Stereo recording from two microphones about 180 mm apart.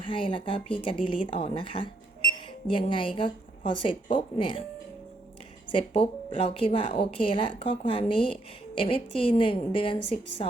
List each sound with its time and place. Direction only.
0.1 s a woman's voice: 30° left (ahead or behind)
5.7 s a woman's voice: 30° left (ahead or behind)